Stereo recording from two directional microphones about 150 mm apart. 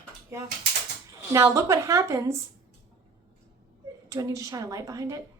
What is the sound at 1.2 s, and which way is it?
A woman's voice, 20° right (ahead or behind).